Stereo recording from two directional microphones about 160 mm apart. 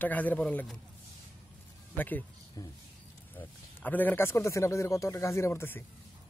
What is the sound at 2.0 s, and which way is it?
Speech, 10° left (ahead or behind).